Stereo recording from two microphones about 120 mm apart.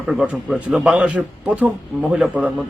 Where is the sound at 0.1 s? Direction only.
5° right (ahead or behind).